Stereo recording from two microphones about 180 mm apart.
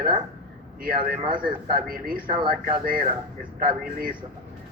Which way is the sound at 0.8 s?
55° right (ahead or behind).